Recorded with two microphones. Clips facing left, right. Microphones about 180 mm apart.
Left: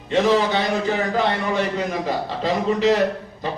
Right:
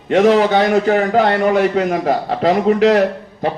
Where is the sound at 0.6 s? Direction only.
65° right (ahead or behind).